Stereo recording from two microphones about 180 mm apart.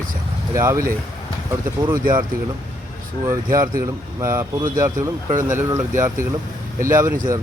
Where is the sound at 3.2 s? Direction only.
20° right (ahead or behind).